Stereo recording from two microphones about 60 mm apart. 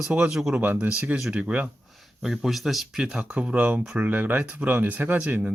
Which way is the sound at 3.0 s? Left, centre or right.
Centre.